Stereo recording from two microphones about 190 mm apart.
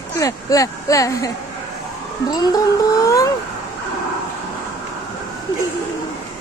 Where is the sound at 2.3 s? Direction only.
20° left (ahead or behind).